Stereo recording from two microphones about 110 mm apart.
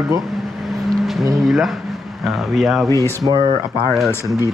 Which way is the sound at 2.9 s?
20° left (ahead or behind).